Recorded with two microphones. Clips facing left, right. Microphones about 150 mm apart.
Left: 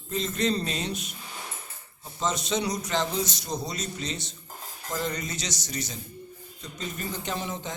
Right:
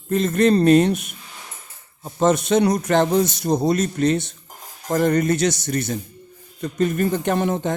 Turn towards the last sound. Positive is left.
turn(degrees=-60)  # may be behind; listen again after turning